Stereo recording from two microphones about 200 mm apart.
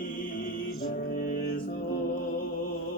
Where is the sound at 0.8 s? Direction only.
45° left (ahead or behind).